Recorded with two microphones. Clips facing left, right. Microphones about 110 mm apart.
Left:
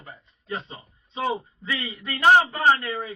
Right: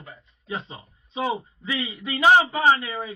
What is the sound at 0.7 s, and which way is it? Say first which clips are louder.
Speech: right 1 dB; 10° right (ahead or behind).